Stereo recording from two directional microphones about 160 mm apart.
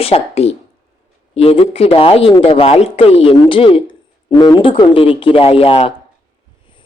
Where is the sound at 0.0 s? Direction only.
40° left (ahead or behind).